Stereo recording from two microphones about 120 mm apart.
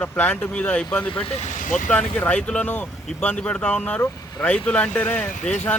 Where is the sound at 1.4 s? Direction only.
90° left.